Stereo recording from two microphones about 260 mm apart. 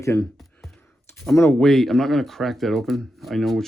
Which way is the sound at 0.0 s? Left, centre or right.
Centre.